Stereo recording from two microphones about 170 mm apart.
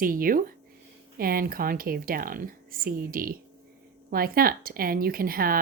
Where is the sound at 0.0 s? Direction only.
55° right (ahead or behind).